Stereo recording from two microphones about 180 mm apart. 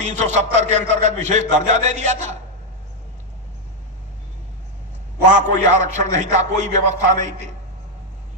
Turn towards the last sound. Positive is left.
turn(degrees=-40)  # may be behind; listen again after turning